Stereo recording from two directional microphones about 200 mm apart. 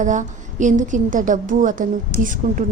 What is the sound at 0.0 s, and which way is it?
A woman's voice, 40° right (ahead or behind).